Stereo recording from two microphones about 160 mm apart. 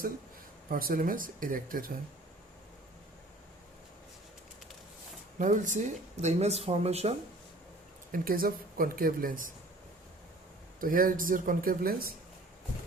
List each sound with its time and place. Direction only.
0.7 s speech: 65° right (ahead or behind)
5.4 s speech: 50° right (ahead or behind)
8.1 s speech: 65° right (ahead or behind)
10.8 s speech: 60° right (ahead or behind)